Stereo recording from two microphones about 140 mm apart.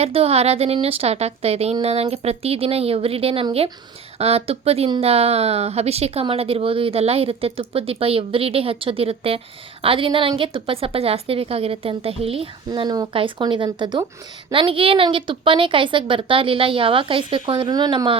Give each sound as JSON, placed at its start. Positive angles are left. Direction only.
{"t": 0.0, "sound": "a woman's voice", "side_deg": -45}